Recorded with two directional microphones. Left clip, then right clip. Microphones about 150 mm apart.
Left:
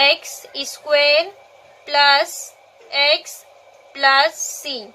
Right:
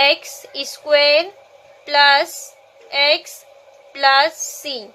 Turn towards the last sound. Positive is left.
turn(degrees=-25)  # may be behind; listen again after turning